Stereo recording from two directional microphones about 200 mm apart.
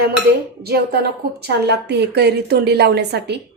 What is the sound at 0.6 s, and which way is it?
A woman's voice, 50° right (ahead or behind).